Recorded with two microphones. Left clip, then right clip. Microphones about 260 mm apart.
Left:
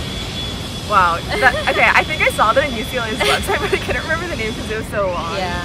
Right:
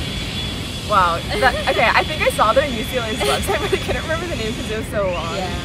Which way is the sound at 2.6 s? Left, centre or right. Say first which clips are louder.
Left 1 dB; left.